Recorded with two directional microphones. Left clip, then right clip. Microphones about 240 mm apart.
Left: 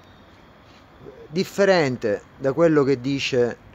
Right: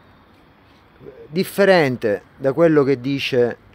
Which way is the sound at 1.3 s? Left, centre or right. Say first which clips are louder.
Right 4 dB; right.